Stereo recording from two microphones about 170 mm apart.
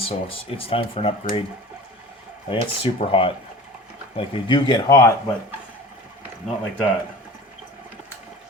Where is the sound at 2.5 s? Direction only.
30° left (ahead or behind).